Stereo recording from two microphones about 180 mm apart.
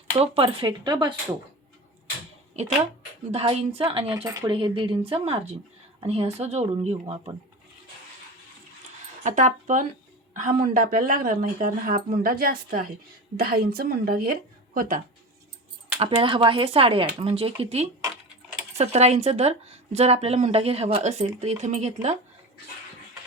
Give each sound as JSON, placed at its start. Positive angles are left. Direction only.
{"t": 0.2, "sound": "speech", "side_deg": -30}
{"t": 2.5, "sound": "speech", "side_deg": -40}
{"t": 4.2, "sound": "speech", "side_deg": -15}
{"t": 4.4, "sound": "speech", "side_deg": -30}
{"t": 9.2, "sound": "a woman's voice", "side_deg": -45}
{"t": 16.0, "sound": "speech", "side_deg": -30}